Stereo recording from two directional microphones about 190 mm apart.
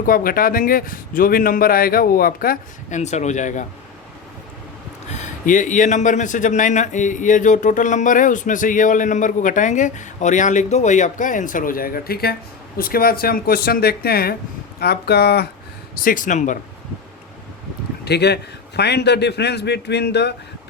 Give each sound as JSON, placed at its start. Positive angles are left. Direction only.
{"t": 0.0, "sound": "a man's voice", "side_deg": 50}
{"t": 5.0, "sound": "a man's voice", "side_deg": 40}
{"t": 16.0, "sound": "a man's voice", "side_deg": 45}
{"t": 18.0, "sound": "speech", "side_deg": 60}